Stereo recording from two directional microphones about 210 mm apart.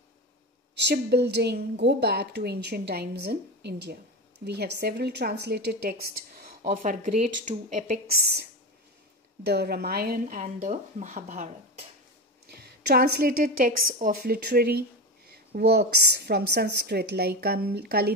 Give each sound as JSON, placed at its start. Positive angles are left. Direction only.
{"t": 0.7, "sound": "a woman's voice", "side_deg": -55}
{"t": 12.4, "sound": "a woman's voice", "side_deg": -50}